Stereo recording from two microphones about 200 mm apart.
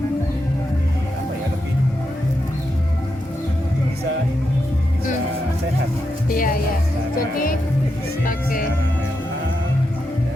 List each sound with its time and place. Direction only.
6.2 s music: 45° left (ahead or behind)
7.2 s speech: 45° left (ahead or behind)
8.2 s music: 45° left (ahead or behind)